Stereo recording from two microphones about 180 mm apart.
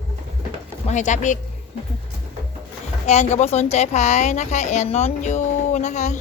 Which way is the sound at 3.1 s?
40° left (ahead or behind).